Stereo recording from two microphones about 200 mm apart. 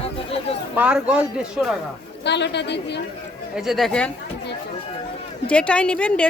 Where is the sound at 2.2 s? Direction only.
60° left (ahead or behind).